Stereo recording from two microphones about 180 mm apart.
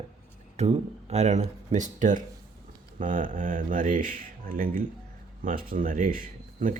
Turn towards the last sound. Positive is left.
turn(degrees=-50)  # may be behind; listen again after turning